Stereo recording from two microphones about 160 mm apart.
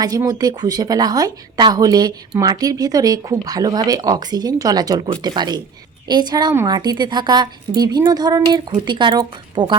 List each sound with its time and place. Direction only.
0.0 s a woman's voice: 25° right (ahead or behind)